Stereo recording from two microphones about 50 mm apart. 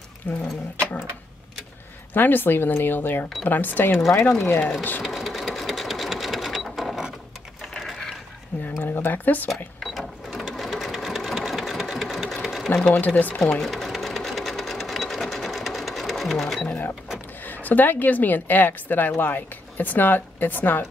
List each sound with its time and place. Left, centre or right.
0.2 s a woman's voice: left
2.1 s a woman's voice: left
5.0 s sewing machine: centre
7.7 s a sound: centre
8.8 s a woman's voice: left
9.8 s sewing machine: centre
12.8 s a woman's voice: left
13.6 s sewing machine: centre
17.5 s a woman's voice: left